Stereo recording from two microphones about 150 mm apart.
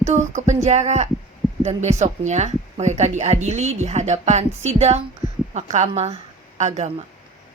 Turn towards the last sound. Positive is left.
turn(degrees=-50)  # may be behind; listen again after turning